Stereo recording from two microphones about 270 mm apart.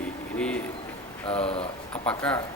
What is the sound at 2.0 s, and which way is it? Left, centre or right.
Speech, centre.